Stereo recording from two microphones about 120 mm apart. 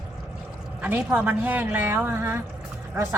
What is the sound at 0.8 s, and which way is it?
A woman's voice, 10° right (ahead or behind).